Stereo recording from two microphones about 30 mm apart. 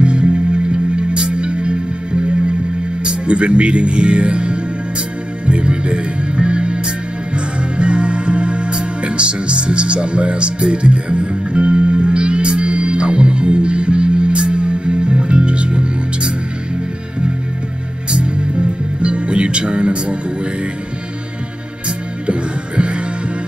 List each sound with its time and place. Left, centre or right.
0.0 s music: right
3.0 s speech: right
5.5 s music: right
18.1 s music: right
22.2 s music: right